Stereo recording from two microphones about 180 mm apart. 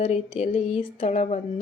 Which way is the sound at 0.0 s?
35° left (ahead or behind).